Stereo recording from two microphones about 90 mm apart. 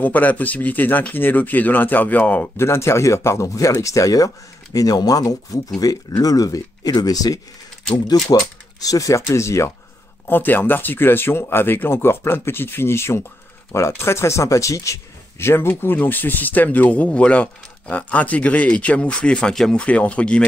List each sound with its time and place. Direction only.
0.0 s speech: 20° left (ahead or behind); by 7.3 s 45° left (ahead or behind)
8.8 s speech: 40° left (ahead or behind)
10.2 s speech: 20° left (ahead or behind)